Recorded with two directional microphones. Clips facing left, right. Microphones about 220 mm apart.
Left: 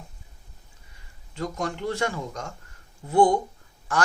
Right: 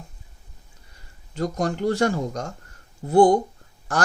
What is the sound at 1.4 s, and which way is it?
Speech, 40° right (ahead or behind).